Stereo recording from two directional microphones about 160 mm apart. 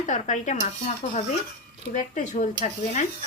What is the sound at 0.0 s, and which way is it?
Speech, 50° left (ahead or behind).